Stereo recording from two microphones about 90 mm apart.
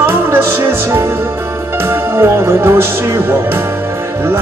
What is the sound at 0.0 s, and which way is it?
Music, 25° right (ahead or behind).